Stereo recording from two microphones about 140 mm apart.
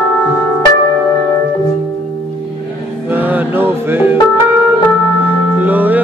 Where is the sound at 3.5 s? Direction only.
15° right (ahead or behind).